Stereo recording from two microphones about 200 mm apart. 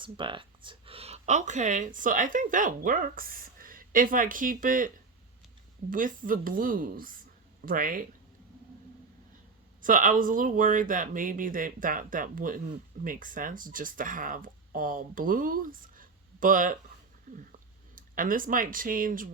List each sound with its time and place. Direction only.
0.0 s speech: 25° right (ahead or behind); by 4.9 s 45° right (ahead or behind)
5.9 s speech: 45° right (ahead or behind)
9.8 s speech: 40° right (ahead or behind)
17.9 s speech: 45° right (ahead or behind)